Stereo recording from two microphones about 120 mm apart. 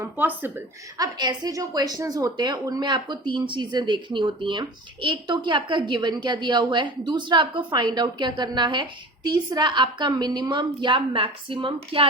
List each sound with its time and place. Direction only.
0.0 s speech: 15° right (ahead or behind)
0.9 s a woman's voice: 35° right (ahead or behind)